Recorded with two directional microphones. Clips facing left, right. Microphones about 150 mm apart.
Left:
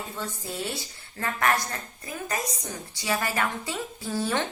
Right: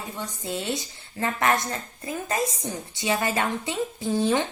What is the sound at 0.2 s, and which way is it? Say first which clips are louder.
A woman's voice: right 2 dB; 20° right (ahead or behind).